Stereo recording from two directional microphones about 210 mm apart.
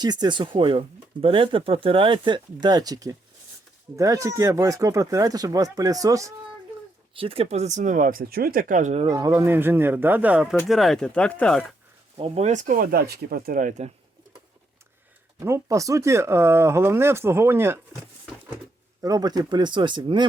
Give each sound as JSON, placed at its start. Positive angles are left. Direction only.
{"t": 0.0, "sound": "speech", "side_deg": -20}
{"t": 7.1, "sound": "speech", "side_deg": -25}
{"t": 12.1, "sound": "speech", "side_deg": -30}
{"t": 15.4, "sound": "speech", "side_deg": -15}
{"t": 19.0, "sound": "speech", "side_deg": -15}